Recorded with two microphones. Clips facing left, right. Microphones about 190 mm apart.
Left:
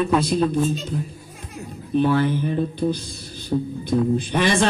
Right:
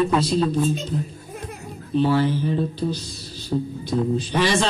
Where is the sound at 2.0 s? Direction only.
55° left (ahead or behind).